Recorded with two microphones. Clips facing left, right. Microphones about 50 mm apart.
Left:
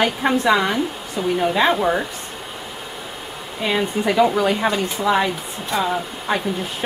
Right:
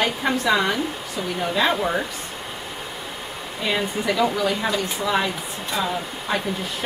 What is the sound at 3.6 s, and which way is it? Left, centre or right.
Speech, centre.